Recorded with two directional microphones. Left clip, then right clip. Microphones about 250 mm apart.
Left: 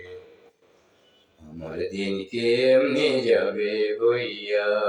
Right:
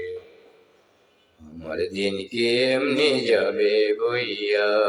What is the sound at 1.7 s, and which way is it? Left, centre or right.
Speech, right.